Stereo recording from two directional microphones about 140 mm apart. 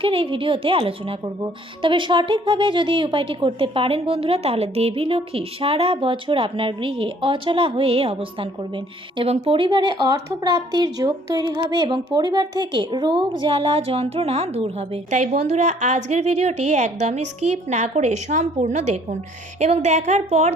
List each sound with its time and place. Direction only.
0.0 s a woman's voice: 40° right (ahead or behind)